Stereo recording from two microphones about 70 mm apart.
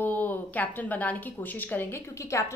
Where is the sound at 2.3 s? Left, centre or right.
Left.